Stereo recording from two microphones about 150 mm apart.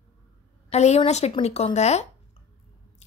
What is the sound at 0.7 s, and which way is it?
Speech, 45° left (ahead or behind).